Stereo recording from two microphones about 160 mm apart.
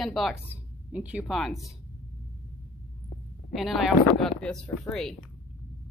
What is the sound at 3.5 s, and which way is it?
A woman's voice, centre (ahead or behind).